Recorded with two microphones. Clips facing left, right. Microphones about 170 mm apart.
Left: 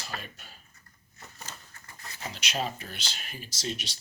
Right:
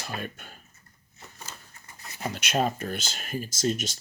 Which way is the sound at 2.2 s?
55° right (ahead or behind).